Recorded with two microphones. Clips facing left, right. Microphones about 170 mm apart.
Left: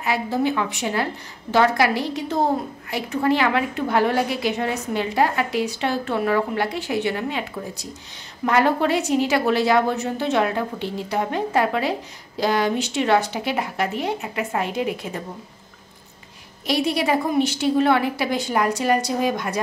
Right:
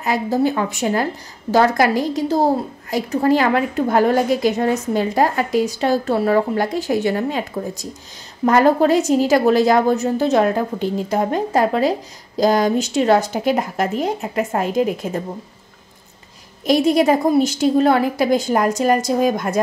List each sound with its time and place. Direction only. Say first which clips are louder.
0.0 s a woman's voice: right 4 dB; 40° right (ahead or behind)
16.6 s a woman's voice: right 7 dB; 45° right (ahead or behind)